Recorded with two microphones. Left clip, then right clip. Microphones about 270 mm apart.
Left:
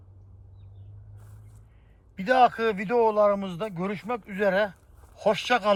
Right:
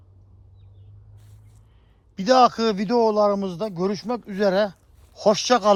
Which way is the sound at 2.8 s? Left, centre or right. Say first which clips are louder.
Right 3 dB; right.